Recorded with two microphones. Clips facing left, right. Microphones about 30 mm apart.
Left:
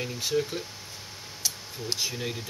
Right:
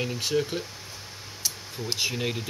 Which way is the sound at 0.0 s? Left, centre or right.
Centre.